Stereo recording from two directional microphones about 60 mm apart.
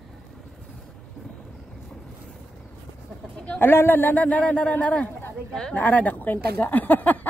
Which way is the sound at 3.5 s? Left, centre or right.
Left.